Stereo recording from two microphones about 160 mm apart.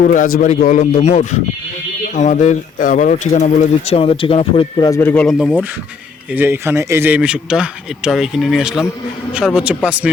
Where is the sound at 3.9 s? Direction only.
35° left (ahead or behind).